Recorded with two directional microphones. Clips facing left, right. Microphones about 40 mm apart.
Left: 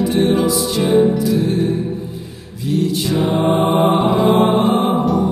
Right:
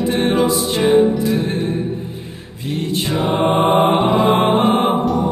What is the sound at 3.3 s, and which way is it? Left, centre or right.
Mantra, right.